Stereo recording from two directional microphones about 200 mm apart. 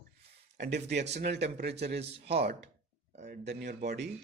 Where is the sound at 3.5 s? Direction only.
55° right (ahead or behind).